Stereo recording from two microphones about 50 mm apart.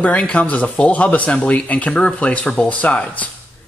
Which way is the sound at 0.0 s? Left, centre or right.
Left.